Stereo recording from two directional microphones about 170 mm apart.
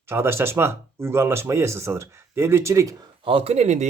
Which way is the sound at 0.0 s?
15° right (ahead or behind).